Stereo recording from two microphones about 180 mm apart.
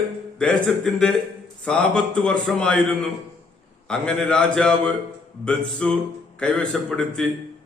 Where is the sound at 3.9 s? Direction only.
5° left (ahead or behind).